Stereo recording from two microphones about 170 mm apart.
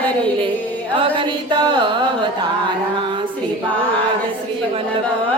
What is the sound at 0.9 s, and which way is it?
Carnatic music, 30° right (ahead or behind).